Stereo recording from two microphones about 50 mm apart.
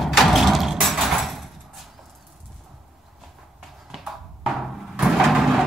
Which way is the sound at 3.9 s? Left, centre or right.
Centre.